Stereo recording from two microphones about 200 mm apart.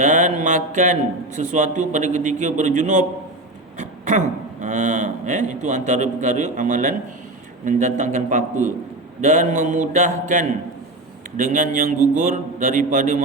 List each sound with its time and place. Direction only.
0.0 s mantra: 40° right (ahead or behind)
1.4 s a man's voice: 40° right (ahead or behind)